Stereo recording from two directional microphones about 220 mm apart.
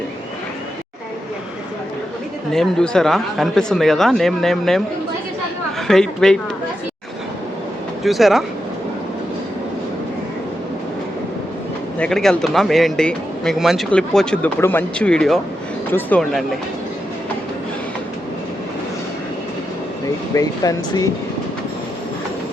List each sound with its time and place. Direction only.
2.5 s speech: centre (ahead or behind)
5.9 s speech: centre (ahead or behind)
8.0 s speech: centre (ahead or behind)
11.9 s speech: 5° left (ahead or behind)
20.3 s speech: 15° left (ahead or behind)